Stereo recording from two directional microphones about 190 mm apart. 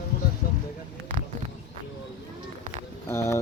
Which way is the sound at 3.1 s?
15° left (ahead or behind).